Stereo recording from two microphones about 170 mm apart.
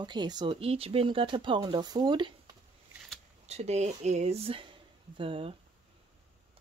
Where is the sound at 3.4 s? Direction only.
40° right (ahead or behind).